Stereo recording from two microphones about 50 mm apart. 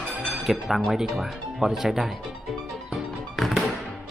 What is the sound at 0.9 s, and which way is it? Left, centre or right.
Speech, centre.